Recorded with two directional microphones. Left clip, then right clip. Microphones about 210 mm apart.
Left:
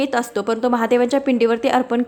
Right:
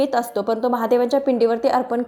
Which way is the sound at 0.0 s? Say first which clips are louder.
Even; 5° left (ahead or behind).